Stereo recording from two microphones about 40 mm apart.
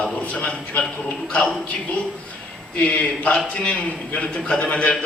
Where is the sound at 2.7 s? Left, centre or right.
Left.